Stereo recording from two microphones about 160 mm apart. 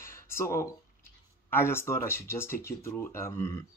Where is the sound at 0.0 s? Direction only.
15° left (ahead or behind).